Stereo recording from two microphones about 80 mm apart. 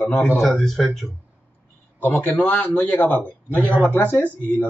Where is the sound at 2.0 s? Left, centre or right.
Left.